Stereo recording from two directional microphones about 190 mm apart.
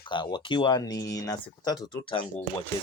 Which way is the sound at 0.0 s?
25° left (ahead or behind).